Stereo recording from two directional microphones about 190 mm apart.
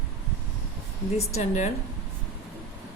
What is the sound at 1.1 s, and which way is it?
Speech, 35° left (ahead or behind).